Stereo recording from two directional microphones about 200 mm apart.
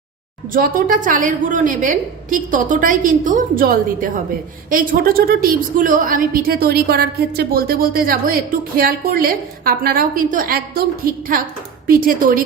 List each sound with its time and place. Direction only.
0.4 s a woman's voice: 45° right (ahead or behind)